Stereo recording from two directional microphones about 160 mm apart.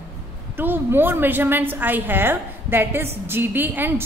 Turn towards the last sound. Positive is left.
turn(degrees=-10)  # may be behind; listen again after turning